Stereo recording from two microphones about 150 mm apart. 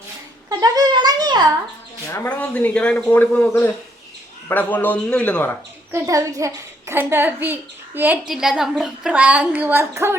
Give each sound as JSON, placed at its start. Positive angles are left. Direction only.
{"t": 0.6, "sound": "a child's voice", "side_deg": -30}
{"t": 2.0, "sound": "speech", "side_deg": 15}
{"t": 5.9, "sound": "a child's voice", "side_deg": -20}